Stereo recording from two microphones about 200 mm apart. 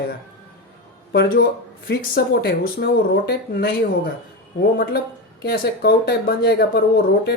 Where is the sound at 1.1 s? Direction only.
55° left (ahead or behind).